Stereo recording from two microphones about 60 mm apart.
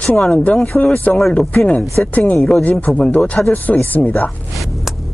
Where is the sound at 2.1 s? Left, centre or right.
Left.